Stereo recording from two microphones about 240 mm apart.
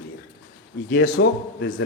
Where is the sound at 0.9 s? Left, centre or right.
Left.